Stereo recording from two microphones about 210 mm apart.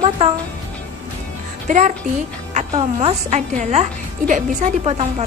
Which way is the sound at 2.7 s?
30° right (ahead or behind).